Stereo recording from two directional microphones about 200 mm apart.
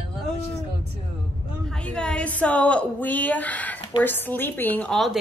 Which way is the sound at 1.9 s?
5° left (ahead or behind).